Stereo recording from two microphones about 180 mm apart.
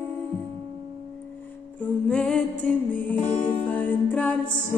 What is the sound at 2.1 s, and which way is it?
Music, 5° left (ahead or behind).